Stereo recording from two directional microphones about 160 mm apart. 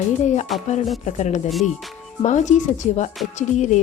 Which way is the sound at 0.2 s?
45° left (ahead or behind).